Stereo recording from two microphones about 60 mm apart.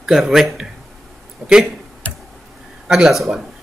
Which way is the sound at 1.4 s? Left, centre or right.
Centre.